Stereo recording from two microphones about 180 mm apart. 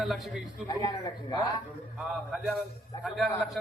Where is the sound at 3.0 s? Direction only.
Centre (ahead or behind).